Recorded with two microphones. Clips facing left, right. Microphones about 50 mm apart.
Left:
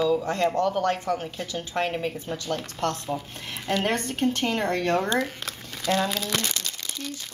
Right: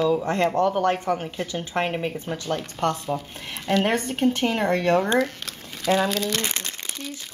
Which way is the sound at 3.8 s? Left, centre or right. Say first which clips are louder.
Right 3 dB; centre.